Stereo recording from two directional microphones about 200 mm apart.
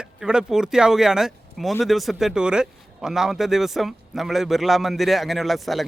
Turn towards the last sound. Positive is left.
turn(degrees=0)  # may be behind; listen again after turning